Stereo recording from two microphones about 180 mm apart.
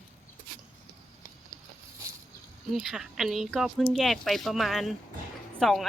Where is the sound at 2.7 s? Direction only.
Centre (ahead or behind).